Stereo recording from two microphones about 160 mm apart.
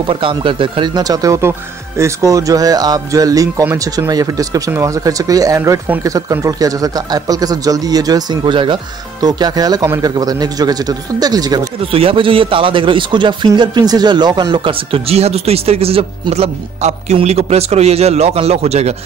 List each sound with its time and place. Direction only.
0.0 s a man's voice: 30° right (ahead or behind)
11.8 s a man's voice: 35° right (ahead or behind)